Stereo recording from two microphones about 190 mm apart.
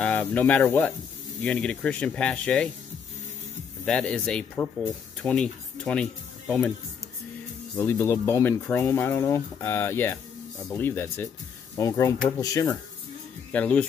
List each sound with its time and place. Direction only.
0.0 s speech: 10° left (ahead or behind)
3.8 s speech: 5° left (ahead or behind)
7.7 s speech: 15° left (ahead or behind)
13.5 s speech: 5° left (ahead or behind)